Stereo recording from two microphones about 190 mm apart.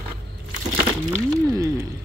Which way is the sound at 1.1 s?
15° right (ahead or behind).